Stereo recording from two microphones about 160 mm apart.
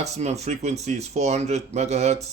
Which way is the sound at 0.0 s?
45° right (ahead or behind).